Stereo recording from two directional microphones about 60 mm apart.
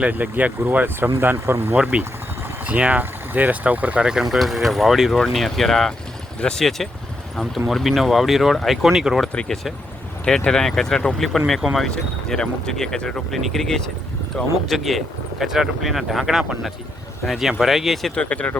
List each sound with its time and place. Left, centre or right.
0.0 s speech: right
1.7 s speech: right
10.2 s speech: centre
11.9 s speech: centre
18.1 s speech: centre